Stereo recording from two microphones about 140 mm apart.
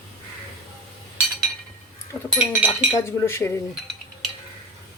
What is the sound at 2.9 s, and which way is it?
Speech, 20° left (ahead or behind).